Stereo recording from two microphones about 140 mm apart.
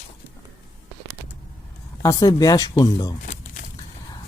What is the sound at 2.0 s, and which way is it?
Speech, 25° left (ahead or behind).